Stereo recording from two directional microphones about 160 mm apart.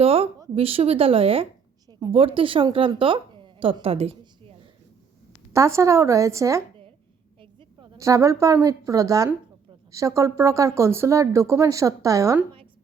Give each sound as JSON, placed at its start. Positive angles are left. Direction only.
{"t": 0.0, "sound": "a woman's voice", "side_deg": -35}
{"t": 5.5, "sound": "speech", "side_deg": -20}
{"t": 7.9, "sound": "speech", "side_deg": -20}